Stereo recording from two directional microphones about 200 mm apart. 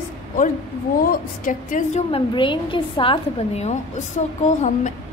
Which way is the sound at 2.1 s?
25° left (ahead or behind).